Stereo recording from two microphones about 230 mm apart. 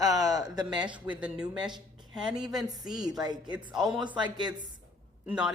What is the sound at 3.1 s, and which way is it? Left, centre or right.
Speech, centre.